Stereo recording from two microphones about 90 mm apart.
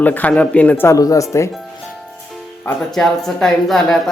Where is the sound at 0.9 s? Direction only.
40° left (ahead or behind).